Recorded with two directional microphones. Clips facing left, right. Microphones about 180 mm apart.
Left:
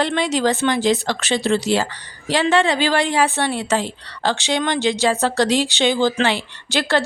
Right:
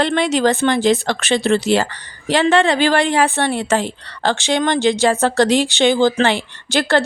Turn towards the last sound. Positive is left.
turn(degrees=-50)  # may be behind; listen again after turning